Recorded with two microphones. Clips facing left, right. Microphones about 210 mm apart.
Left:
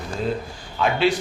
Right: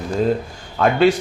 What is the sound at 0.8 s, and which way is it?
Speech, 45° right (ahead or behind).